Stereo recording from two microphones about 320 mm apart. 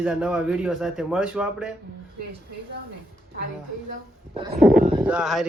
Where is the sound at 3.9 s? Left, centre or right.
Centre.